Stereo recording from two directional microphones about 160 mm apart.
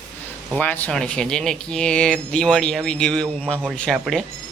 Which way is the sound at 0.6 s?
10° left (ahead or behind).